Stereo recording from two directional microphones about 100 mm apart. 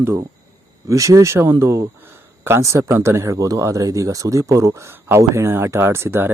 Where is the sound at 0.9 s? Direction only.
30° right (ahead or behind).